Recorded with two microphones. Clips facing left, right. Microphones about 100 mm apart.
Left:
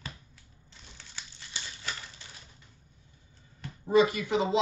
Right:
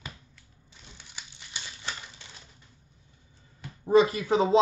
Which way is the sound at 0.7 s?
15° right (ahead or behind).